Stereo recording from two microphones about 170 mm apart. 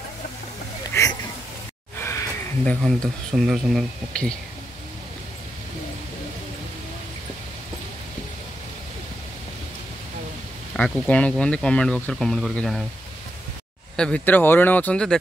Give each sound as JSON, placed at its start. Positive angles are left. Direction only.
{"t": 1.0, "sound": "a sound", "side_deg": 15}
{"t": 2.0, "sound": "speech", "side_deg": 15}
{"t": 10.8, "sound": "speech", "side_deg": 10}
{"t": 13.9, "sound": "speech", "side_deg": 5}